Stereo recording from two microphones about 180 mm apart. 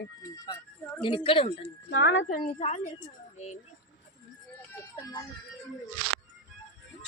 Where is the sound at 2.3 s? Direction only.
55° left (ahead or behind).